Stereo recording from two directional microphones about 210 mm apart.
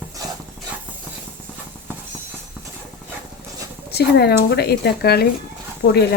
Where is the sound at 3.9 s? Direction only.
50° left (ahead or behind).